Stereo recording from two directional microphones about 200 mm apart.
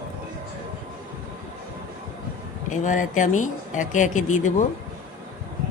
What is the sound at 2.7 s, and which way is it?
Speech, 40° left (ahead or behind).